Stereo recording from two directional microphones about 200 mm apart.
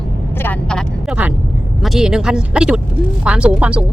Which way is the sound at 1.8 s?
Centre (ahead or behind).